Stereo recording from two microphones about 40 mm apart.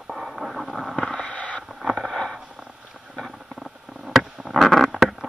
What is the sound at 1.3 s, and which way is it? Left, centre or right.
Boat, left.